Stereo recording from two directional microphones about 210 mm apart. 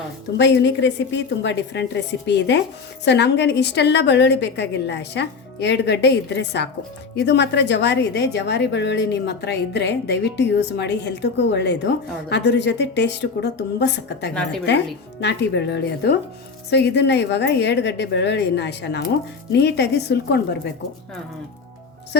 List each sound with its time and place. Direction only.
0.3 s a woman's voice: 55° left (ahead or behind)